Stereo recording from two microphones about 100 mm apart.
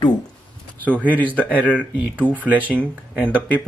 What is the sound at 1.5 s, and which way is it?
Speech, 15° left (ahead or behind).